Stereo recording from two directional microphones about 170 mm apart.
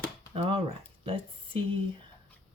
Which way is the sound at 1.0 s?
35° right (ahead or behind).